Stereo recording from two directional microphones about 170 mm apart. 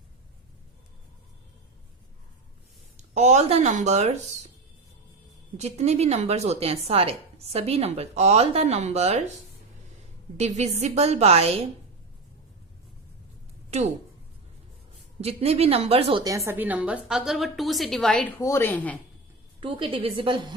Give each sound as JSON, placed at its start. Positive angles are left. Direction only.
{"t": 3.2, "sound": "speech", "side_deg": -40}
{"t": 5.5, "sound": "speech", "side_deg": -40}
{"t": 10.3, "sound": "speech", "side_deg": -40}
{"t": 15.2, "sound": "speech", "side_deg": -35}
{"t": 16.2, "sound": "a woman's voice", "side_deg": -20}
{"t": 18.3, "sound": "speech", "side_deg": 15}
{"t": 19.5, "sound": "a woman's voice", "side_deg": -30}